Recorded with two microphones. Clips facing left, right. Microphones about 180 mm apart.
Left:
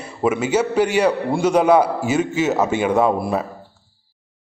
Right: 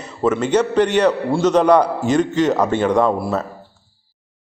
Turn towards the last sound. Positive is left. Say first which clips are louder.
# even
turn(degrees=20)  # may be behind; listen again after turning